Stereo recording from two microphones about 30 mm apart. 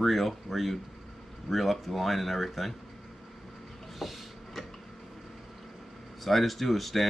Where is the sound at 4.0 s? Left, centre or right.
Centre.